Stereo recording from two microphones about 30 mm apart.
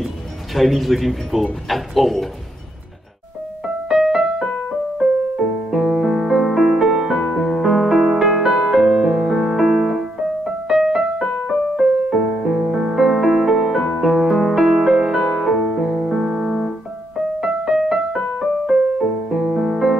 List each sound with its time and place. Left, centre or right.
0.6 s speech: centre
3.6 s music: centre
4.1 s keyboard: centre
5.4 s music: centre
8.9 s music: centre